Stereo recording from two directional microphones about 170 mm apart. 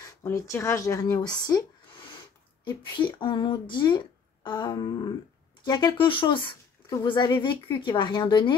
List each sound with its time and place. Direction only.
0.0 s speech: 15° left (ahead or behind)